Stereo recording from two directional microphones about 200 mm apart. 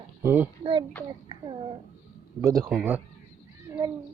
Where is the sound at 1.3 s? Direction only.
25° right (ahead or behind).